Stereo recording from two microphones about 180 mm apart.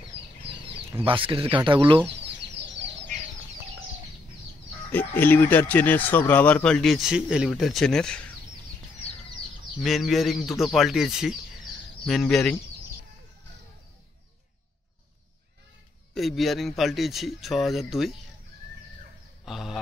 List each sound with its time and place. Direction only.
1.0 s speech: 30° right (ahead or behind)
4.9 s speech: 10° left (ahead or behind)
9.8 s speech: centre (ahead or behind)
16.2 s speech: centre (ahead or behind)
19.4 s a man's voice: centre (ahead or behind)